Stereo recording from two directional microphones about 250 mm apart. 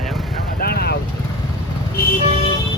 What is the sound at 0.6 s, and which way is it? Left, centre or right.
Vehicle, left.